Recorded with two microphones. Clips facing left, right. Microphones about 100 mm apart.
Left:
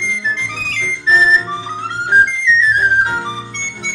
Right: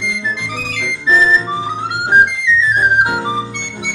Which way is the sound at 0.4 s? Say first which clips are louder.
Right 1 dB; 15° right (ahead or behind).